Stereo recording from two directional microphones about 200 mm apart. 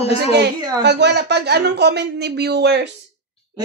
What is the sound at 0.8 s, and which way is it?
Speech, 60° right (ahead or behind).